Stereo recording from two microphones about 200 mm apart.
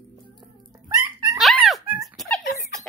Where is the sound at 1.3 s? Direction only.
Centre (ahead or behind).